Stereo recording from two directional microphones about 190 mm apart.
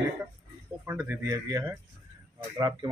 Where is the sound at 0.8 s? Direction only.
10° right (ahead or behind).